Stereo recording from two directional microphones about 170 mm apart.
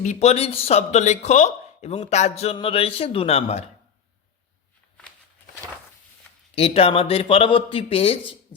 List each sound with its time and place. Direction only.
0.0 s speech: 40° left (ahead or behind)
6.6 s speech: 35° left (ahead or behind)